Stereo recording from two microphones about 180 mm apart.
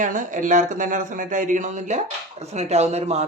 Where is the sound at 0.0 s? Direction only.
45° right (ahead or behind).